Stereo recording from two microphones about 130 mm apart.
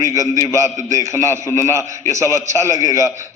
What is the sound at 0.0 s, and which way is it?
A man's voice, 25° right (ahead or behind).